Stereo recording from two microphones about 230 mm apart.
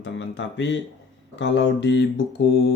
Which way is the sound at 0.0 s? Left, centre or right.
Left.